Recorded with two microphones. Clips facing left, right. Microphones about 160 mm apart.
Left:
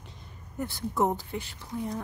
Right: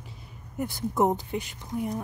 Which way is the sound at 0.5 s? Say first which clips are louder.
Right 3 dB; 15° right (ahead or behind).